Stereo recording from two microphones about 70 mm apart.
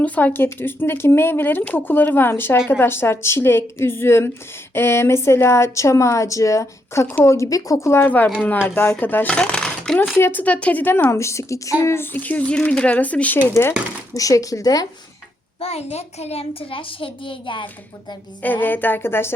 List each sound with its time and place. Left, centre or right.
0.0 s speech: left
8.0 s speech: left
9.3 s a sound: centre
10.2 s speech: left
10.4 s speech: left
11.1 s speech: left
12.1 s speech: left
12.5 s speech: centre
13.5 s speech: left
14.2 s speech: left
18.4 s speech: left